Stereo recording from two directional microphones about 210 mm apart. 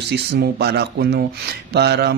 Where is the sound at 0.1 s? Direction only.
50° right (ahead or behind).